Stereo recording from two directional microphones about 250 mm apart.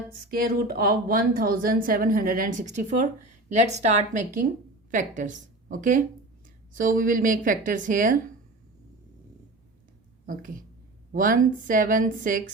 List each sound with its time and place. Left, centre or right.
0.3 s a woman's voice: right
11.1 s a woman's voice: right